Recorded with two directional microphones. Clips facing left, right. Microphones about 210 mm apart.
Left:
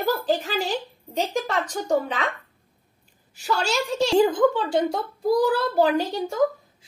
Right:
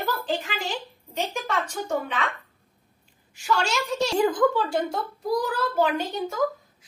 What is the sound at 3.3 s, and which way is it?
Speech, 35° left (ahead or behind).